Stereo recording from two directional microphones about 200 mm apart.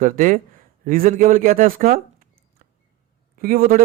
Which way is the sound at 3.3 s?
45° right (ahead or behind).